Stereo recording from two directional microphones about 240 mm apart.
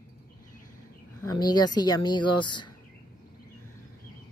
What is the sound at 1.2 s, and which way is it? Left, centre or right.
Speech, centre.